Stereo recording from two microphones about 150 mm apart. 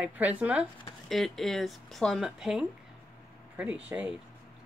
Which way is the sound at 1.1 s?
Centre (ahead or behind).